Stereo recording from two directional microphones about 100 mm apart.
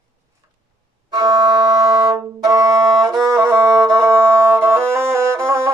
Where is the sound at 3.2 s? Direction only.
25° right (ahead or behind).